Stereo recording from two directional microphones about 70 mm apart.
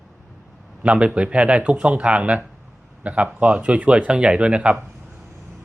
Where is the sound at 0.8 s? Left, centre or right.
Centre.